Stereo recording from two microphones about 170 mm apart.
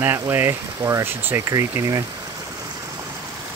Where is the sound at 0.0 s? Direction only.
15° right (ahead or behind).